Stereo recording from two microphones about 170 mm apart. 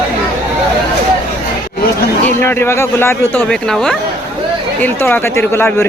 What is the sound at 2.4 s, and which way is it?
Speech, 15° left (ahead or behind).